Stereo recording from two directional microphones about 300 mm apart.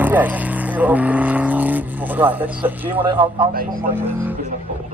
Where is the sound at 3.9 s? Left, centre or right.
Centre.